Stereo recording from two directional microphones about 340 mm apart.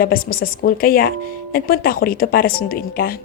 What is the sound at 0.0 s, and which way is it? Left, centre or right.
A woman's voice, left.